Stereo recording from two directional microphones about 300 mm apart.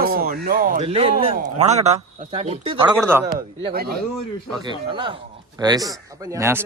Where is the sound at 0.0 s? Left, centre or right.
Right.